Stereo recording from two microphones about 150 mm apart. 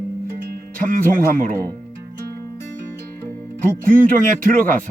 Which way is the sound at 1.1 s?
65° right (ahead or behind).